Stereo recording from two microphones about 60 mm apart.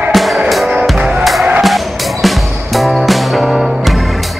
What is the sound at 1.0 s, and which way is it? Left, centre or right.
Music, centre.